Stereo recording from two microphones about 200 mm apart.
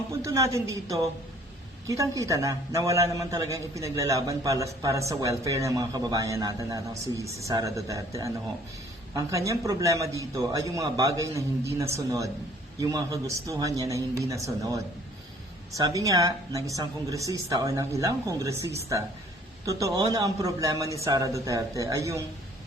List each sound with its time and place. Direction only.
0.1 s a woman's voice: 15° right (ahead or behind)
15.8 s a man's voice: 15° right (ahead or behind)